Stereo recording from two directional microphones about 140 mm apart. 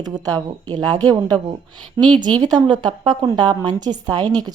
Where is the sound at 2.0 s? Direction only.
35° right (ahead or behind).